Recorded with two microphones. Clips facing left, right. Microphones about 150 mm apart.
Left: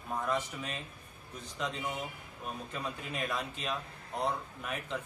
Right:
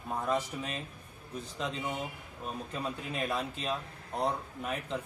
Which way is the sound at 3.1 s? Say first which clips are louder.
Right 2 dB; 30° right (ahead or behind).